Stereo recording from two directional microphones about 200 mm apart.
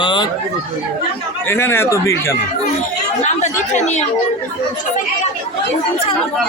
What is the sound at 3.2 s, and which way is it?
Speech, 35° left (ahead or behind).